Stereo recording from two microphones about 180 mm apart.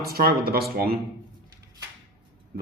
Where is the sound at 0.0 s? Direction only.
55° right (ahead or behind).